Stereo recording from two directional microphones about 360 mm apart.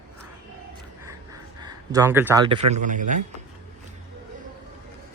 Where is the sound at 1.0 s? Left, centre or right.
Centre.